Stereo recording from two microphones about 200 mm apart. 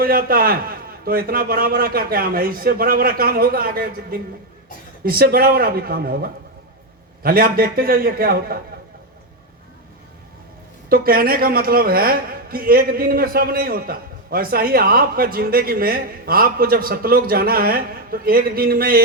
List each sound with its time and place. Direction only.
0.0 s a woman's voice: 45° right (ahead or behind)
10.8 s a woman's voice: 45° right (ahead or behind)